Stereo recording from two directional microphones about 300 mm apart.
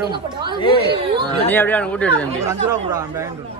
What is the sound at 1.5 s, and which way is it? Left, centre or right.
Speech, centre.